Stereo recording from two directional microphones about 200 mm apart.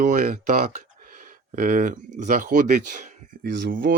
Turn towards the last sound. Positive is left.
turn(degrees=-45)  # may be behind; listen again after turning